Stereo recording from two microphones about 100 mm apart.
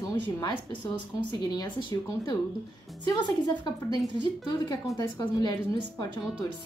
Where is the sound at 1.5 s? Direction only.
50° left (ahead or behind).